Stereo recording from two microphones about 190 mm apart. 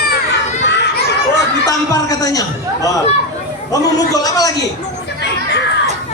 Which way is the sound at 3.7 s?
20° left (ahead or behind).